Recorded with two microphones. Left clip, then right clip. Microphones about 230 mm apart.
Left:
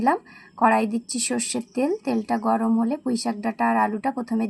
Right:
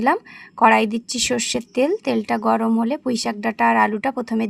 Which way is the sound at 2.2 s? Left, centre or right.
Right.